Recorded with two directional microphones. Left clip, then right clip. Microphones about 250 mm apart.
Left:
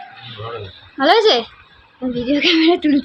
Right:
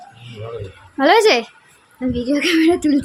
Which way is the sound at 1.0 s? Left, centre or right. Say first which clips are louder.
Even; centre.